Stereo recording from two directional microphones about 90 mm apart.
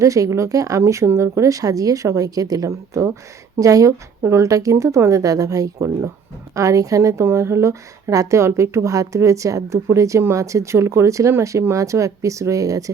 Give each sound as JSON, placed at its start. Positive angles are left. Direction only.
{"t": 0.0, "sound": "a woman's voice", "side_deg": -35}